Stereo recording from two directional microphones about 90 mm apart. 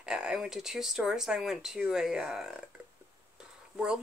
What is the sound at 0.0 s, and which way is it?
Speech, 10° right (ahead or behind).